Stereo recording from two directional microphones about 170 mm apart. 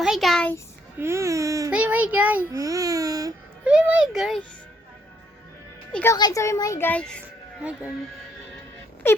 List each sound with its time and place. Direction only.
0.0 s a child's voice: centre (ahead or behind)
0.9 s speech: 15° right (ahead or behind)
1.7 s a child's voice: 10° right (ahead or behind)
3.6 s a child's voice: 5° right (ahead or behind)
5.9 s a child's voice: 10° left (ahead or behind)
7.6 s a child's voice: 5° right (ahead or behind)
9.0 s wail: 15° left (ahead or behind)